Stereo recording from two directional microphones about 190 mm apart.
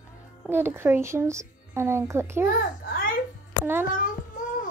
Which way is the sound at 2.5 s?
50° left (ahead or behind).